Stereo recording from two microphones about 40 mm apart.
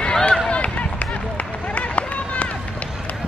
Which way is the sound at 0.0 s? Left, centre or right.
Left.